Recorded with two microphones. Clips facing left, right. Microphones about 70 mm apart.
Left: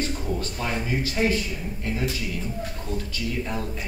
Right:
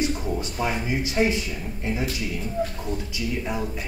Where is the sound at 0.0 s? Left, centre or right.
Centre.